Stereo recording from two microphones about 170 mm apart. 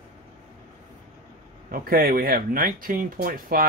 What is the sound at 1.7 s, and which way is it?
Speech, 60° right (ahead or behind).